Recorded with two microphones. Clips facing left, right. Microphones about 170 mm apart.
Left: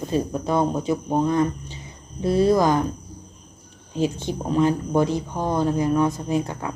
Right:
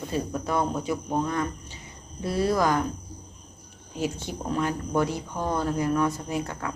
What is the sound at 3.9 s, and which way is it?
Speech, 20° left (ahead or behind).